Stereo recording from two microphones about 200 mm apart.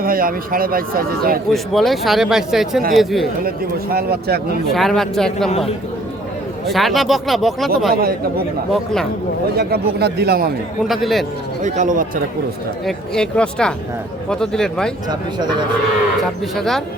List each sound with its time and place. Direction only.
0.0 s speech: 45° right (ahead or behind)
1.5 s speech: centre (ahead or behind)
3.9 s speech: 50° right (ahead or behind)
4.7 s speech: centre (ahead or behind)
5.5 s a man's voice: 30° left (ahead or behind)
6.7 s speech: centre (ahead or behind)
9.6 s speech: 50° right (ahead or behind)
10.8 s speech: centre (ahead or behind)
11.6 s speech: 40° right (ahead or behind)
12.8 s speech: 5° left (ahead or behind)
16.6 s speech: centre (ahead or behind)